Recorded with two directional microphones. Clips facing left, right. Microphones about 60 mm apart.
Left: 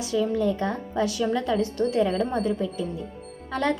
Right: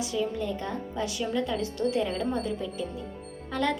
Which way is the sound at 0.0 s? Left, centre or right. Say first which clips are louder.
Left 6 dB; left.